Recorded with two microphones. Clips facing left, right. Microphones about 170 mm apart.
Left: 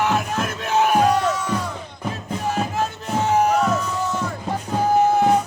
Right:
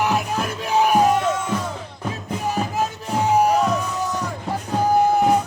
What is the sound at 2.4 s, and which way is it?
Music, 10° right (ahead or behind).